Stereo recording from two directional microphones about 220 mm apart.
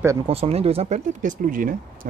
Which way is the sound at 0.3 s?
25° right (ahead or behind).